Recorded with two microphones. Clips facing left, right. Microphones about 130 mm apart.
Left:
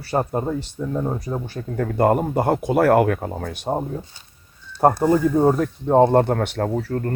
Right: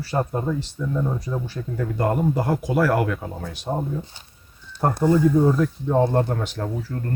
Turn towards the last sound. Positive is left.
turn(degrees=65)  # may be behind; listen again after turning